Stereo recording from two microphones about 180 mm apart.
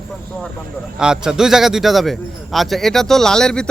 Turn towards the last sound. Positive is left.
turn(degrees=5)  # may be behind; listen again after turning